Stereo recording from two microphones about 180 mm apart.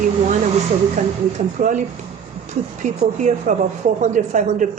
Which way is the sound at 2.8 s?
40° right (ahead or behind).